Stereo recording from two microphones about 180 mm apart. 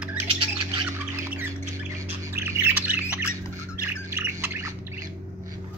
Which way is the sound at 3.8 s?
15° right (ahead or behind).